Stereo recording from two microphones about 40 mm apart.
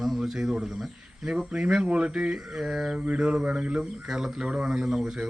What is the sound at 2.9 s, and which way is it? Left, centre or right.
Mantra, right.